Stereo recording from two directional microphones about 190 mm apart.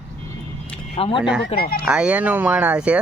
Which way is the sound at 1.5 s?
55° left (ahead or behind).